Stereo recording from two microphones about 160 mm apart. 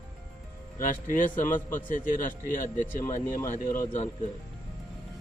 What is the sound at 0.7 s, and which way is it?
Speech, 55° left (ahead or behind).